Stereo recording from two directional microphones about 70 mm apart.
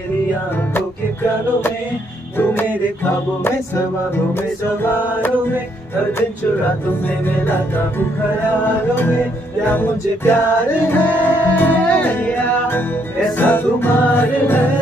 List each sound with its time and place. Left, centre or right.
2.3 s music: left
7.1 s music: left
9.7 s music: left